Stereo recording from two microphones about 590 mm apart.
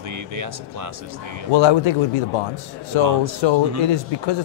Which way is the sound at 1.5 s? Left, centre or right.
Left.